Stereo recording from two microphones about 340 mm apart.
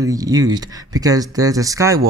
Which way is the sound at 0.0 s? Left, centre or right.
Centre.